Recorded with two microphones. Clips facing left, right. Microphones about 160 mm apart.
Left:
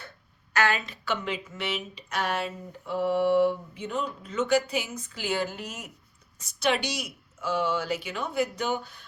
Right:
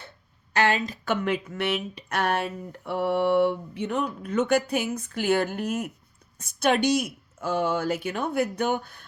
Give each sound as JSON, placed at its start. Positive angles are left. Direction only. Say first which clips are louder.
{"t": 0.5, "sound": "a woman's voice", "louder": "right 3 dB", "side_deg": -35}
{"t": 1.0, "sound": "a woman's voice", "louder": "right 5 dB", "side_deg": -55}